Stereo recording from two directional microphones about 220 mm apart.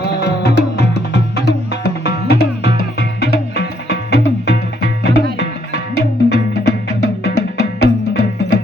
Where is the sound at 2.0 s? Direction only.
50° left (ahead or behind).